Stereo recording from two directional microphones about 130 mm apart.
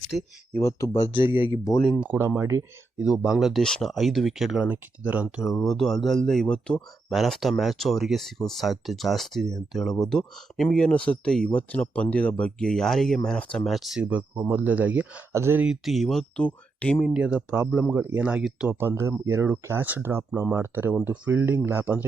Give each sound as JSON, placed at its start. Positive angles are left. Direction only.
{"t": 0.5, "sound": "speech", "side_deg": 25}
{"t": 1.0, "sound": "speech", "side_deg": 40}
{"t": 1.9, "sound": "speech", "side_deg": -10}
{"t": 3.0, "sound": "speech", "side_deg": -5}
{"t": 17.2, "sound": "speech", "side_deg": -10}